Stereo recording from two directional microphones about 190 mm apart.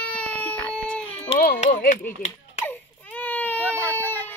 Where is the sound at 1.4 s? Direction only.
50° left (ahead or behind).